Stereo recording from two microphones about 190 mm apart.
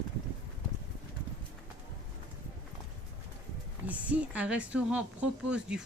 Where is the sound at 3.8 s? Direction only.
5° right (ahead or behind).